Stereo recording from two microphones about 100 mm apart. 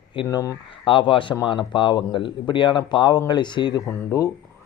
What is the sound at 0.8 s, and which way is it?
A man's voice, 60° left (ahead or behind).